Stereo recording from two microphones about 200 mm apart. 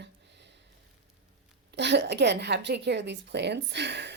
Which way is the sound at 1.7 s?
60° right (ahead or behind).